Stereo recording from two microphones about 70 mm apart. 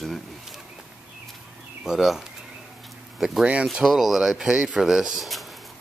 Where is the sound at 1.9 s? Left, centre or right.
Centre.